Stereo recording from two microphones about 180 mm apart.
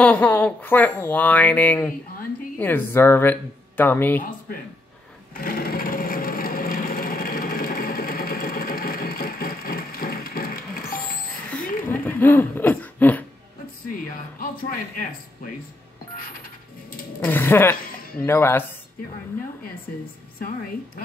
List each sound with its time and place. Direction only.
0.0 s speech: 5° left (ahead or behind)
5.3 s wood: 55° left (ahead or behind)
11.9 s a sound: 10° left (ahead or behind)
13.9 s speech: 50° left (ahead or behind)
17.2 s speech: 10° left (ahead or behind)
20.3 s speech: 50° left (ahead or behind)